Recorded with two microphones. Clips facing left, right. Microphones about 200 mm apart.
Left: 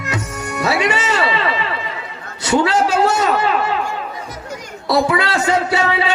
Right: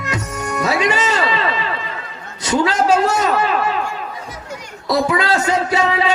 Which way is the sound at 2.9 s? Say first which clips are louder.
Even; 30° left (ahead or behind).